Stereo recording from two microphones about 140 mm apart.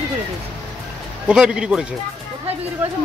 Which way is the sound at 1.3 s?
5° right (ahead or behind).